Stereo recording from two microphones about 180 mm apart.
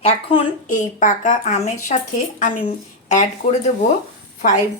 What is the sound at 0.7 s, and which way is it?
A woman's voice, 45° left (ahead or behind).